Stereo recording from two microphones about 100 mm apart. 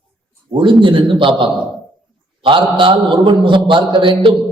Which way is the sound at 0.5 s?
55° right (ahead or behind).